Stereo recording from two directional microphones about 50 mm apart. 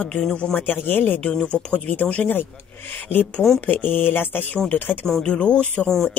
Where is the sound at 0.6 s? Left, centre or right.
Left.